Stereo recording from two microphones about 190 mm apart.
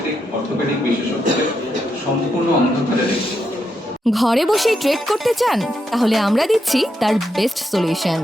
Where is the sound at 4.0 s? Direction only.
Centre (ahead or behind).